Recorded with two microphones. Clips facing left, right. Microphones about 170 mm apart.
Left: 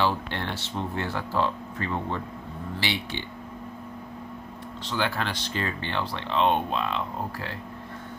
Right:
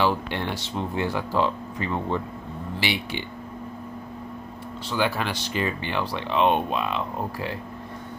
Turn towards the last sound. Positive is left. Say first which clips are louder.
# right 3 dB
turn(degrees=-15)  # may be behind; listen again after turning